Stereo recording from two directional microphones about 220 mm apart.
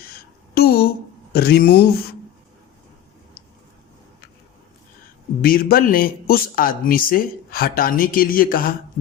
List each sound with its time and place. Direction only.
0.5 s speech: 45° left (ahead or behind)
5.4 s speech: 40° left (ahead or behind)